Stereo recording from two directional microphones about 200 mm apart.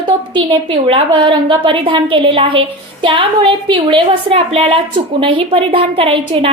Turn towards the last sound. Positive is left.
turn(degrees=-25)  # may be behind; listen again after turning